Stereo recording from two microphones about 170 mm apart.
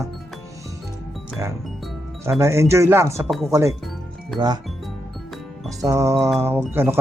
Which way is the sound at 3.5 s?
15° right (ahead or behind).